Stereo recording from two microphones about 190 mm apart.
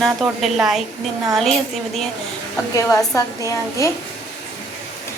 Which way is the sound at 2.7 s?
20° left (ahead or behind).